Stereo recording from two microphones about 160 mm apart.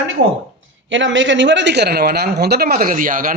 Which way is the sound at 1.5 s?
90° right.